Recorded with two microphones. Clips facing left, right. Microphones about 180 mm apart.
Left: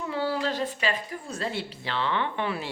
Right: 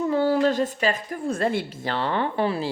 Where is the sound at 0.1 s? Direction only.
45° right (ahead or behind).